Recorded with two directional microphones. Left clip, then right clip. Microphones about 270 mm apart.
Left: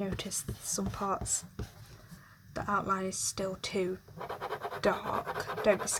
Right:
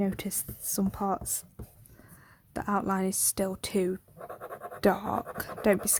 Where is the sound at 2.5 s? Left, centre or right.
Right.